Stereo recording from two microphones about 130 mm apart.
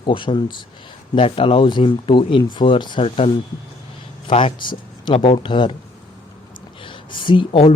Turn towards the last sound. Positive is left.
turn(degrees=45)  # may be behind; listen again after turning